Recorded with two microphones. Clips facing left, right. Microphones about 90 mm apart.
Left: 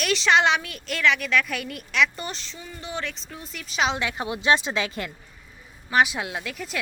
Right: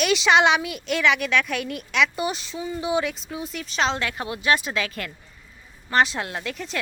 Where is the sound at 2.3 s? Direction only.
10° right (ahead or behind).